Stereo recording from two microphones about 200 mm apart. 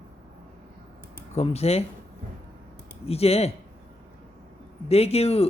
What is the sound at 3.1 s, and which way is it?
Speech, 30° left (ahead or behind).